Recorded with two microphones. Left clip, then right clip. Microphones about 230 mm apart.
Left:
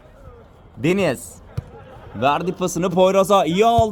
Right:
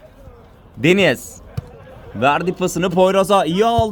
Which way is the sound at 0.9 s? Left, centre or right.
Right.